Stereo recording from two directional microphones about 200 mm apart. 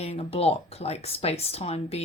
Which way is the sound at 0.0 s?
30° left (ahead or behind).